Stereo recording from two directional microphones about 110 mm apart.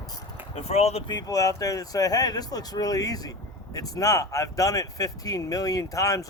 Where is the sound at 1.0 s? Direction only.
35° left (ahead or behind).